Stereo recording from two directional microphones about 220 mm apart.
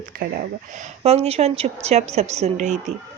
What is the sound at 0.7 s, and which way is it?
A woman's voice, 30° right (ahead or behind).